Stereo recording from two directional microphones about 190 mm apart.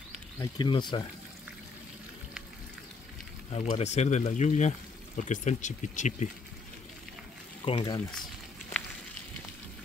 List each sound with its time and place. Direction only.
0.4 s speech: 25° left (ahead or behind)
3.5 s speech: 35° left (ahead or behind)
7.6 s speech: 25° left (ahead or behind)